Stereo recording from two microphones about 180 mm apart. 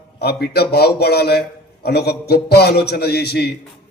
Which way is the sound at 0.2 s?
60° left (ahead or behind).